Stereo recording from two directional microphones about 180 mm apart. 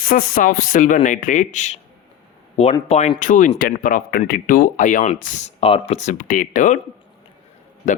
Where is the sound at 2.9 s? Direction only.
35° left (ahead or behind).